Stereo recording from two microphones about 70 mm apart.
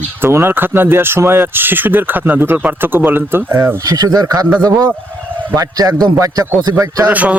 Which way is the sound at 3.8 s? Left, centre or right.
Right.